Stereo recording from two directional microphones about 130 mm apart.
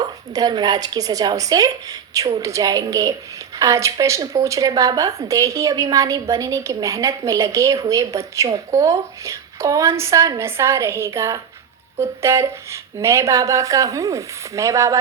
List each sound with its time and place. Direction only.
0.0 s speech: 30° right (ahead or behind)